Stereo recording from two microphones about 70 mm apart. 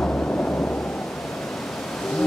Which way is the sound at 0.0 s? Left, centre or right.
Centre.